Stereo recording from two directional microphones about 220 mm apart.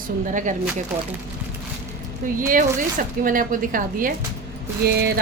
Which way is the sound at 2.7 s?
40° right (ahead or behind).